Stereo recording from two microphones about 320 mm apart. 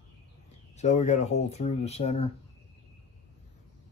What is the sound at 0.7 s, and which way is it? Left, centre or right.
Speech, left.